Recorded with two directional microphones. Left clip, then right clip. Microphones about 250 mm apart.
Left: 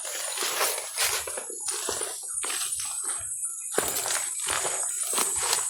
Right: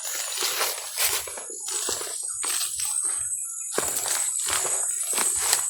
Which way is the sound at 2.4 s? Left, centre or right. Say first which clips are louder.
Right 2 dB; centre.